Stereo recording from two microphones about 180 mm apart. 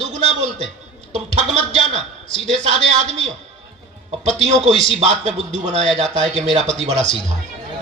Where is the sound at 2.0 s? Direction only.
30° left (ahead or behind).